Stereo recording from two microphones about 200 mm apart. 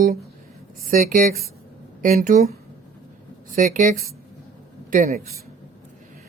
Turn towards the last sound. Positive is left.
turn(degrees=-40)  # may be behind; listen again after turning